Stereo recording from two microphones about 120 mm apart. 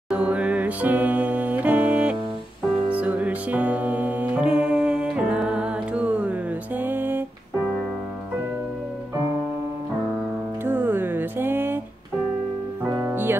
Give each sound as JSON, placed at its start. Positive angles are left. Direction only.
{"t": 0.1, "sound": "music", "side_deg": -10}
{"t": 4.6, "sound": "humming", "side_deg": -10}
{"t": 6.8, "sound": "a sound", "side_deg": -15}
{"t": 10.6, "sound": "music", "side_deg": -15}
{"t": 12.9, "sound": "music", "side_deg": -15}